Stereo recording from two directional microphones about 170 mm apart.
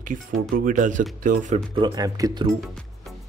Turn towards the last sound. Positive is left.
turn(degrees=0)  # may be behind; listen again after turning